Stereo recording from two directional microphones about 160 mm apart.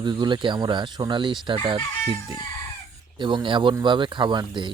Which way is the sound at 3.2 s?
30° right (ahead or behind).